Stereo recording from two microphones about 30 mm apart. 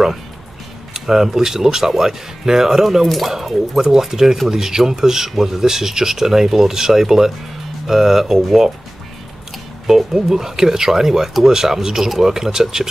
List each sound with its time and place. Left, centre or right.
0.9 s speech: centre
3.7 s speech: centre
9.8 s speech: centre